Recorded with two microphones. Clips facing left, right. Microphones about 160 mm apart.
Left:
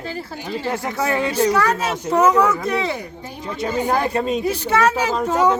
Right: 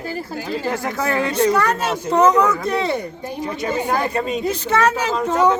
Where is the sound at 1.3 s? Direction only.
Centre (ahead or behind).